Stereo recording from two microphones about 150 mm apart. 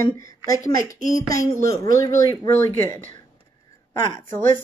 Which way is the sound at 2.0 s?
20° left (ahead or behind).